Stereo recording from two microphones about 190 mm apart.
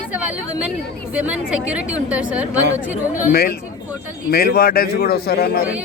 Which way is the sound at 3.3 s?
50° left (ahead or behind).